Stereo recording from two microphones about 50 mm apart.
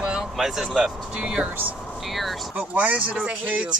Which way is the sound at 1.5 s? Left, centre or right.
Right.